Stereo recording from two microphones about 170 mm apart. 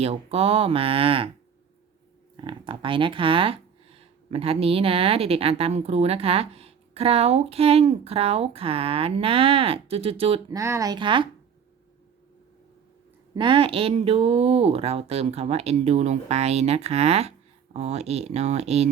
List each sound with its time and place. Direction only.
0.0 s speech: 35° right (ahead or behind)
2.3 s speech: 30° right (ahead or behind)
10.5 s speech: 20° right (ahead or behind)
13.3 s speech: 30° right (ahead or behind)